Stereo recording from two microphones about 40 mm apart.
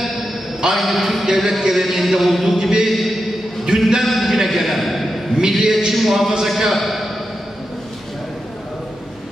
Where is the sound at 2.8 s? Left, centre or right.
Centre.